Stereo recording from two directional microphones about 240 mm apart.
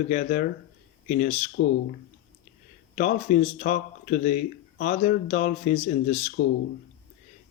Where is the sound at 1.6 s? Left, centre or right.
Left.